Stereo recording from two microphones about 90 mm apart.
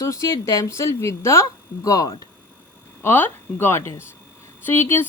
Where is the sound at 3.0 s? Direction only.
25° left (ahead or behind).